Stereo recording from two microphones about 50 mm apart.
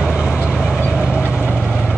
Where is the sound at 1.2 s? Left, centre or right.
Left.